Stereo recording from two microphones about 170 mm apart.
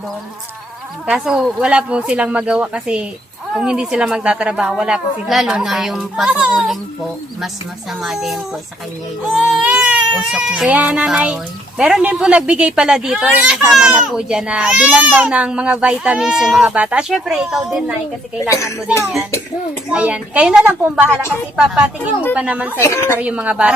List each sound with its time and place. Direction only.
1.0 s speech: 5° right (ahead or behind)
9.4 s speech: 5° right (ahead or behind)
18.3 s a woman's voice: 15° left (ahead or behind)
19.9 s a child's voice: 5° right (ahead or behind)
22.4 s a child's voice: 10° right (ahead or behind)
22.8 s a woman's voice: 15° left (ahead or behind)
23.1 s a child's voice: 10° right (ahead or behind)